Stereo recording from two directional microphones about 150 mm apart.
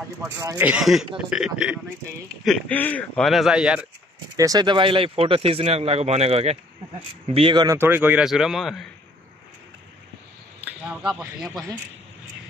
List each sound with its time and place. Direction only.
0.2 s speech: 20° right (ahead or behind)
0.7 s speech: 5° right (ahead or behind)
2.4 s speech: 5° left (ahead or behind)
4.4 s speech: 25° right (ahead or behind)
7.6 s speech: 15° right (ahead or behind); by 8.8 s centre (ahead or behind)
11.0 s speech: 5° right (ahead or behind)